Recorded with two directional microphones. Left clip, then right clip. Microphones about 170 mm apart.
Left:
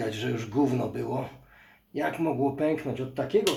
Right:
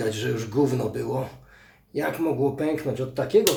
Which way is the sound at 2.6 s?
15° left (ahead or behind).